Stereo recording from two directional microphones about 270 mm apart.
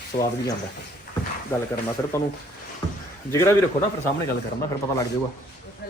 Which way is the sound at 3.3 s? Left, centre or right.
Centre.